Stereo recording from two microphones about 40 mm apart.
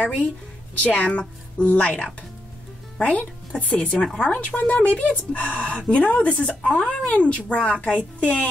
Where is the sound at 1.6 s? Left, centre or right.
Left.